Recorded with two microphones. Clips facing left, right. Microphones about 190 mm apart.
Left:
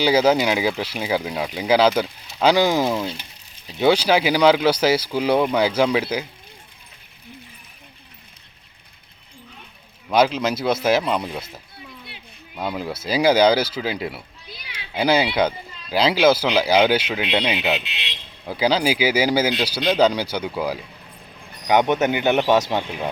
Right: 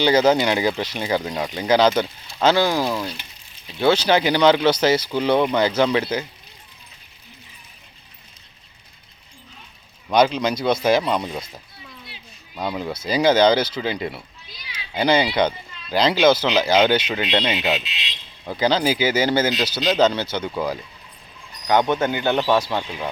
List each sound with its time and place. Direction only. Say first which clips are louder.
0.0 s speech: even; 10° left (ahead or behind)
10.1 s speech: right 1 dB; 5° left (ahead or behind)
12.5 s speech: even; 5° left (ahead or behind)
17.8 s a man's voice: left 1 dB; 60° left (ahead or behind)
18.4 s speech: even; 10° left (ahead or behind)
21.3 s a sound: right 1 dB; 55° left (ahead or behind)
21.7 s speech: left 1 dB; 15° left (ahead or behind)